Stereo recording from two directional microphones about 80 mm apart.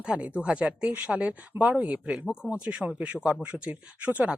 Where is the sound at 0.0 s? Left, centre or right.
Centre.